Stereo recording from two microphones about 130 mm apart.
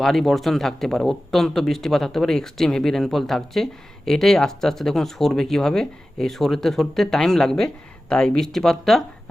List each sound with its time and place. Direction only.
0.0 s speech: centre (ahead or behind)